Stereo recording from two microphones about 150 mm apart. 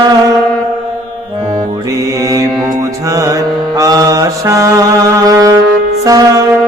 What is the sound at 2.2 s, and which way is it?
Mantra, 20° right (ahead or behind).